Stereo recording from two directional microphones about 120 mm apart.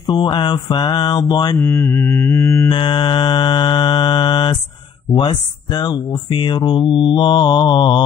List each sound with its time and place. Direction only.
0.0 s speech: 40° left (ahead or behind)
1.7 s mantra: 20° left (ahead or behind)
2.7 s speech: 40° left (ahead or behind)